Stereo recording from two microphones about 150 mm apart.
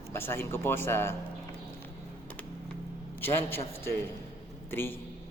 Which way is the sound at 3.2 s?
15° left (ahead or behind).